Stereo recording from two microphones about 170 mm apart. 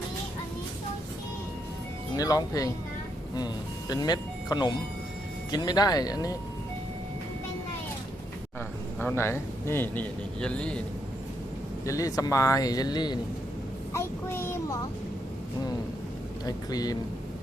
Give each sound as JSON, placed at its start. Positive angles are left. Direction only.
{"t": 2.1, "sound": "speech", "side_deg": 20}
{"t": 9.0, "sound": "a man's voice", "side_deg": 15}
{"t": 11.9, "sound": "a man's voice", "side_deg": 20}
{"t": 16.5, "sound": "speech", "side_deg": 20}